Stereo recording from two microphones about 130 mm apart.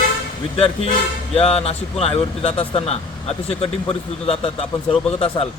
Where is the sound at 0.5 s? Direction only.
50° left (ahead or behind).